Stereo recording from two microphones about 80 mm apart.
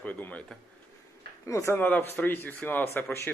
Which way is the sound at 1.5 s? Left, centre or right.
Left.